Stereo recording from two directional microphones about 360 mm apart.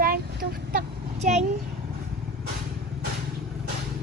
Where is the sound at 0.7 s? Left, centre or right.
Right.